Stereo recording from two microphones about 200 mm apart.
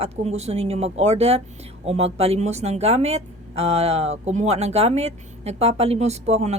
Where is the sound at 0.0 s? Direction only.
30° right (ahead or behind).